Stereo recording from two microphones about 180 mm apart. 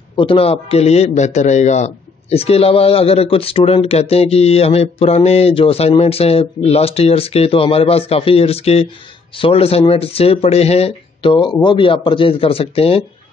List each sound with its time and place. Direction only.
0.1 s a man's voice: 30° left (ahead or behind)